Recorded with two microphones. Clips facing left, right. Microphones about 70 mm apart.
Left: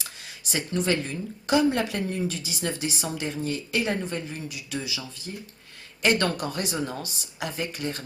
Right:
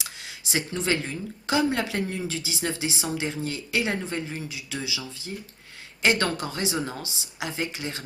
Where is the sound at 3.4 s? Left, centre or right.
Right.